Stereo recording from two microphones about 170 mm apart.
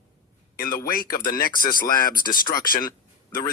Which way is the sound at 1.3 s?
60° left (ahead or behind).